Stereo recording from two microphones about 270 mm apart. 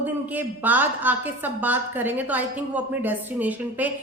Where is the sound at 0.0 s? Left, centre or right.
Centre.